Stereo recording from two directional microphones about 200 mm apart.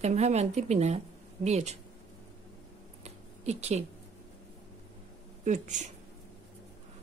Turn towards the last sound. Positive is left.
turn(degrees=-35)  # may be behind; listen again after turning